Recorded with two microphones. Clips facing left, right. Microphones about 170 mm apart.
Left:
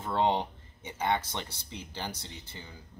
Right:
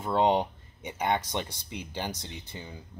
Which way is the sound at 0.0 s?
15° right (ahead or behind).